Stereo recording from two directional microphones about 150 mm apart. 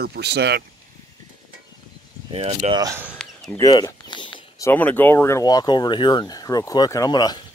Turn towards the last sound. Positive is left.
turn(degrees=25)  # may be behind; listen again after turning